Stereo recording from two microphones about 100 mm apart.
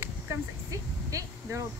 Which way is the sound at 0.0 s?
30° right (ahead or behind).